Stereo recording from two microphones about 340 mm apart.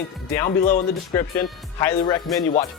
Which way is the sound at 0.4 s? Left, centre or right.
Left.